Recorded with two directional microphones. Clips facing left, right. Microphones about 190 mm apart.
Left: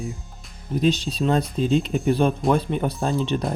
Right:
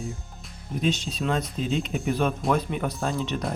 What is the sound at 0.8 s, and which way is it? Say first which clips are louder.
Speech: left 5 dB; 35° left (ahead or behind).